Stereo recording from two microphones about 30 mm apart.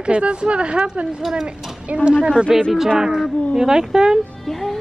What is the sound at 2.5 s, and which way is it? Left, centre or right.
A woman's voice, centre.